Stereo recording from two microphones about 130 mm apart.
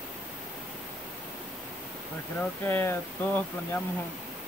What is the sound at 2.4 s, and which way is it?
Speech, 15° left (ahead or behind).